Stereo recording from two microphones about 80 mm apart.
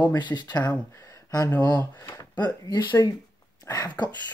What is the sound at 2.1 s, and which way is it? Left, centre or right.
Speech, left.